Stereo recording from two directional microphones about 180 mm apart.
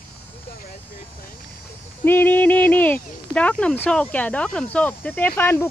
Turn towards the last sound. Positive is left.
turn(degrees=10)  # may be behind; listen again after turning